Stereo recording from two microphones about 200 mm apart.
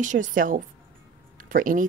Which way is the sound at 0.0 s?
40° right (ahead or behind).